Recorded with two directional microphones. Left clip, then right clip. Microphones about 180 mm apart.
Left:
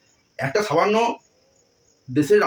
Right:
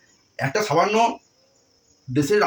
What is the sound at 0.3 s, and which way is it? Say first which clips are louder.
Speech: even; 5° right (ahead or behind).